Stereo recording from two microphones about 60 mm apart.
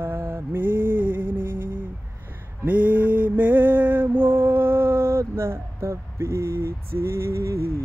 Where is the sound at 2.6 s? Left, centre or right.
Right.